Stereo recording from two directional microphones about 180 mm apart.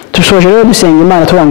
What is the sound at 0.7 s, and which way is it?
Speech, 15° left (ahead or behind).